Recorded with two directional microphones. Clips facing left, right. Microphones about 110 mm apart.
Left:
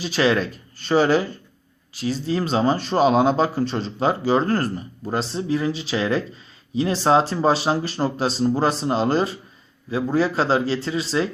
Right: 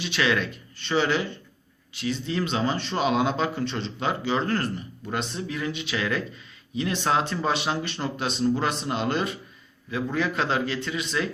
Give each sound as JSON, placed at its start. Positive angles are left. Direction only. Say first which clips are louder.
{"t": 0.0, "sound": "a man's voice", "louder": "left 5 dB", "side_deg": 35}